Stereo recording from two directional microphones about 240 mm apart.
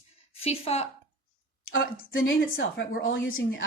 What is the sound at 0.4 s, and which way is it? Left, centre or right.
Speech, left.